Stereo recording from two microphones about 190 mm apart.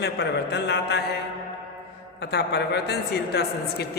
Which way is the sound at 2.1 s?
60° left (ahead or behind).